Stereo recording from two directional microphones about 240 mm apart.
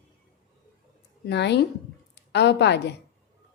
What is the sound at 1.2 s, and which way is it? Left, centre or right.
A woman's voice, left.